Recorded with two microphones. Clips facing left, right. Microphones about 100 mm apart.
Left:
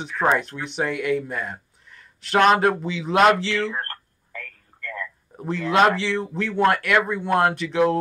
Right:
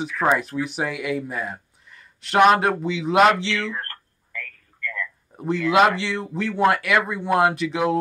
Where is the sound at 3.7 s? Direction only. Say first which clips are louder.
Left 1 dB; 35° left (ahead or behind).